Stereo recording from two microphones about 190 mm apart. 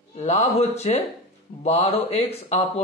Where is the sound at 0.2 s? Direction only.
35° left (ahead or behind).